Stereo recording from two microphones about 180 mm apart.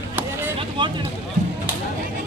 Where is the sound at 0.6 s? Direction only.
25° right (ahead or behind).